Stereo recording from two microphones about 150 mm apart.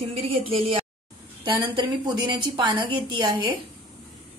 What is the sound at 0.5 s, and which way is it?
A woman's voice, 40° right (ahead or behind).